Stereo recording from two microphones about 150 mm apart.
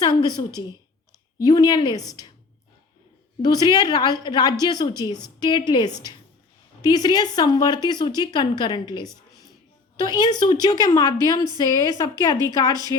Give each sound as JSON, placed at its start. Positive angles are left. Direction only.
{"t": 0.0, "sound": "a woman's voice", "side_deg": 25}
{"t": 3.4, "sound": "a woman's voice", "side_deg": 25}